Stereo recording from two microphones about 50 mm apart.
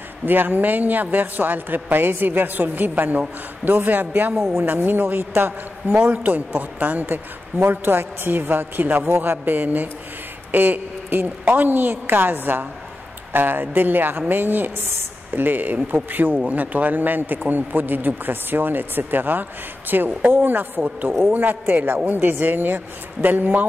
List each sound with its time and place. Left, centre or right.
0.2 s a man's voice: right
9.1 s a man's voice: right